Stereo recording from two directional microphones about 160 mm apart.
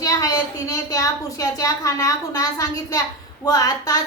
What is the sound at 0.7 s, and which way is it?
A woman's voice, 20° left (ahead or behind).